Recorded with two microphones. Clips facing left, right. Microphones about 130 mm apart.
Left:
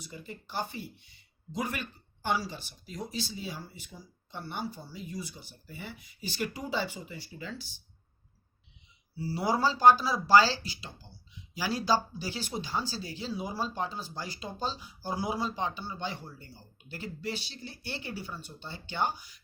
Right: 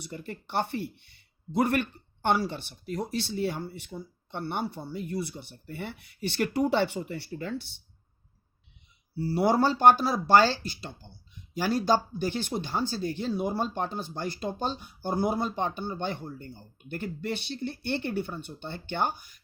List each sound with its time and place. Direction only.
0.0 s speech: 65° right (ahead or behind)
7.3 s speech: 55° right (ahead or behind)
9.1 s speech: 60° right (ahead or behind)